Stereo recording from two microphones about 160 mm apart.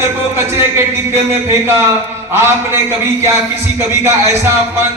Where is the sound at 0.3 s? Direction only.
15° right (ahead or behind).